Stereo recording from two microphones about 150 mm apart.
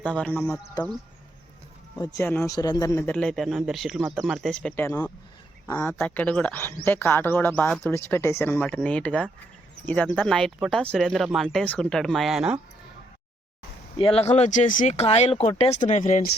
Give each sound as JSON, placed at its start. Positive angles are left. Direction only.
{"t": 0.0, "sound": "speech", "side_deg": 10}
{"t": 2.1, "sound": "speech", "side_deg": 15}
{"t": 3.1, "sound": "a man's voice", "side_deg": 5}
{"t": 14.0, "sound": "speech", "side_deg": 40}
{"t": 14.9, "sound": "speech", "side_deg": 45}